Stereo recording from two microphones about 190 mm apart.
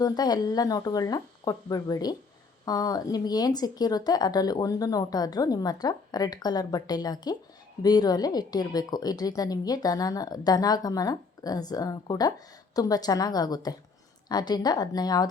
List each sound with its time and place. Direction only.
0.0 s a woman's voice: 20° left (ahead or behind)